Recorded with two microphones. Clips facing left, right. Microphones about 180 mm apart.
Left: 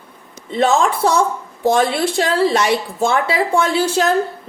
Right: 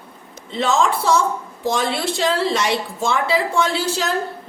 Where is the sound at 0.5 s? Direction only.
55° left (ahead or behind).